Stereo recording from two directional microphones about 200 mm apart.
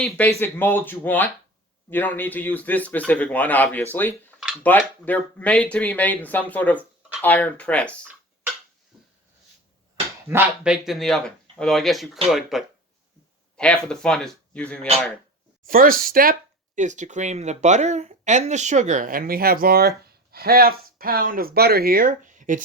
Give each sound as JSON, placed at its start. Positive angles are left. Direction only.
{"t": 0.0, "sound": "speech", "side_deg": 10}
{"t": 4.4, "sound": "cutlery", "side_deg": -5}
{"t": 5.0, "sound": "speech", "side_deg": 5}
{"t": 10.2, "sound": "speech", "side_deg": -10}
{"t": 15.6, "sound": "speech", "side_deg": -45}